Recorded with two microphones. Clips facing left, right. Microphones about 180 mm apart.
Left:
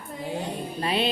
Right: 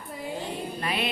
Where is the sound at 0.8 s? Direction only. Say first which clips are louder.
Left 6 dB; 30° left (ahead or behind).